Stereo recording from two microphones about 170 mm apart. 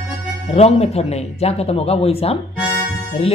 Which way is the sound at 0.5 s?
35° left (ahead or behind).